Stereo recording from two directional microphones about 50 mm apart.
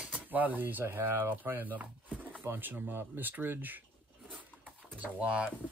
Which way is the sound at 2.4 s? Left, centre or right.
Right.